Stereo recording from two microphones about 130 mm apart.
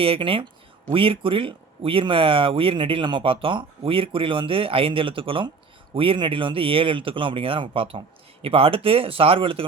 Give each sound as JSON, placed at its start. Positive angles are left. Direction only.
{"t": 0.0, "sound": "speech", "side_deg": -45}